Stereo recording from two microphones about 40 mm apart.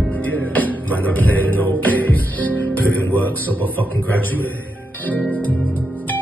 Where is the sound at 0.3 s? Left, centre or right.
Left.